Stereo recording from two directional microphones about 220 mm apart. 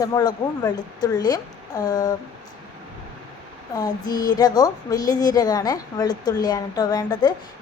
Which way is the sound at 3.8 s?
15° left (ahead or behind).